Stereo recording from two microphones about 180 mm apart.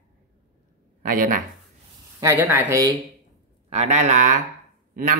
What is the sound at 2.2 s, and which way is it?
Speech, 15° right (ahead or behind).